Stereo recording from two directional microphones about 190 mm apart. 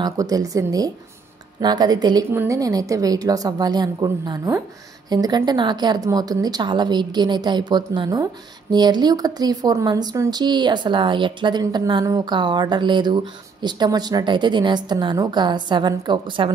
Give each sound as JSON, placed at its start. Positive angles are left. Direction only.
{"t": 0.0, "sound": "speech", "side_deg": -20}